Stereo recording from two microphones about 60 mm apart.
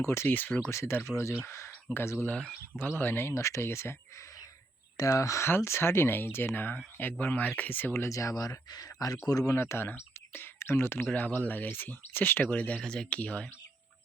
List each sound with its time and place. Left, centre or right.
0.0 s speech: left
0.3 s speech: left
0.7 s speech: left
1.9 s speech: left
2.2 s speech: left
2.7 s speech: left
3.4 s speech: left
4.9 s speech: left
5.5 s speech: left
8.0 s speech: left
9.6 s speech: left
11.1 s speech: left